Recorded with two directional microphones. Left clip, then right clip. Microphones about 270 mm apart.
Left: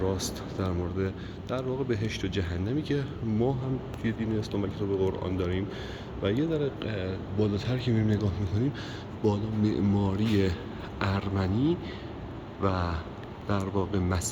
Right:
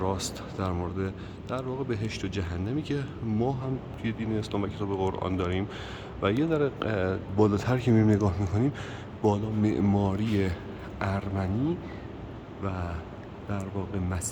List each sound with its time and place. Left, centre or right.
0.0 s speech: centre